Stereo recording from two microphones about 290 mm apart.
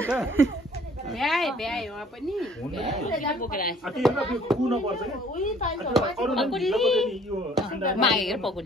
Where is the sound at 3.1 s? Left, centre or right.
Left.